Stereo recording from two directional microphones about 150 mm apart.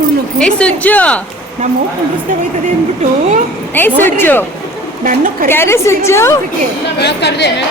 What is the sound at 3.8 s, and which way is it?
Speech, 15° left (ahead or behind).